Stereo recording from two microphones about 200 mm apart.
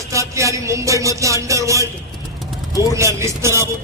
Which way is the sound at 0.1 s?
15° right (ahead or behind).